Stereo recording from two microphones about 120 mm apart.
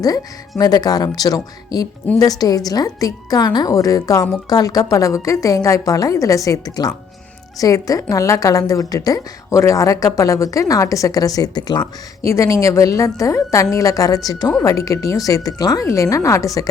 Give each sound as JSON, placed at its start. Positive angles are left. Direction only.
{"t": 0.6, "sound": "a woman's voice", "side_deg": 35}
{"t": 12.2, "sound": "a woman's voice", "side_deg": 25}